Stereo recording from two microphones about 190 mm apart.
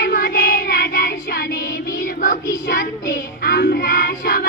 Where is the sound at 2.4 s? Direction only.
20° left (ahead or behind).